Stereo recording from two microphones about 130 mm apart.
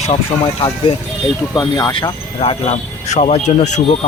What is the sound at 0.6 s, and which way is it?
Speech, 40° left (ahead or behind).